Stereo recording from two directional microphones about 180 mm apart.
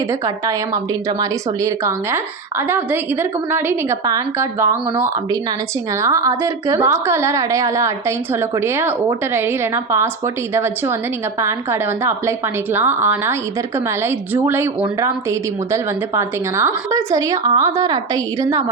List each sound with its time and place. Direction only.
0.1 s a woman's voice: 20° right (ahead or behind)